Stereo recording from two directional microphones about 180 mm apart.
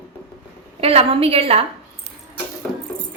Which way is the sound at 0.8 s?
35° right (ahead or behind).